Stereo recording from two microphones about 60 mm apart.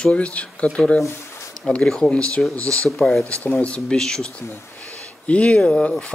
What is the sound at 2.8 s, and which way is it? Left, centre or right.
Speech, centre.